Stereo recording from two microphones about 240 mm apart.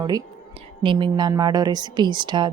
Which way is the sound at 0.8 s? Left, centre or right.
Centre.